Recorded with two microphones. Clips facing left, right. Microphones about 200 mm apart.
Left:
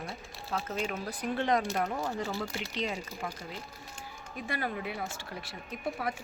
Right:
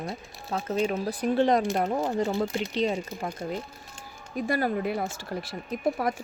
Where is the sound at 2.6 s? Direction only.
35° right (ahead or behind).